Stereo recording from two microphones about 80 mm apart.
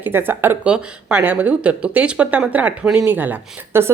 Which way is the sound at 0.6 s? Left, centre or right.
Centre.